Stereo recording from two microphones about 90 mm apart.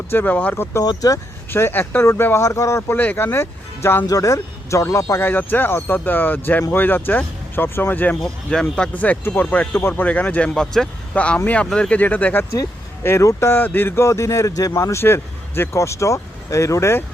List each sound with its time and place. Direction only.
0.1 s speech: 20° left (ahead or behind)
0.8 s speech: 40° left (ahead or behind)
1.5 s speech: 25° left (ahead or behind)
4.0 s speech: 40° left (ahead or behind); by 8.1 s 20° left (ahead or behind)
8.2 s speech: 5° left (ahead or behind); by 17.0 s 35° left (ahead or behind)